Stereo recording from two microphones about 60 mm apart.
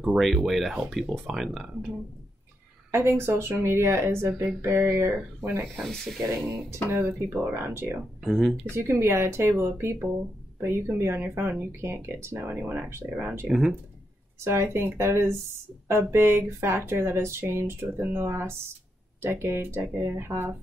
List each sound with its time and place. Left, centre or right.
0.0 s speech: centre
2.9 s speech: right
5.8 s speech: centre
6.3 s speech: right
8.2 s speech: centre
8.7 s speech: right
11.8 s speech: right